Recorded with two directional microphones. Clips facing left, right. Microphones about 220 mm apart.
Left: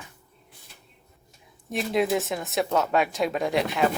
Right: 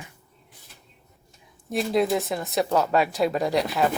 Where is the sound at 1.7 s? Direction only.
Centre (ahead or behind).